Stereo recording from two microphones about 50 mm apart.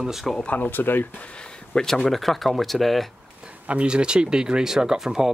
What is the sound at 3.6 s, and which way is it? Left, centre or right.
Speech, right.